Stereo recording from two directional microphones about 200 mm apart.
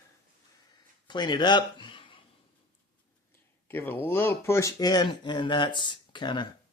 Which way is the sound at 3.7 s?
10° left (ahead or behind).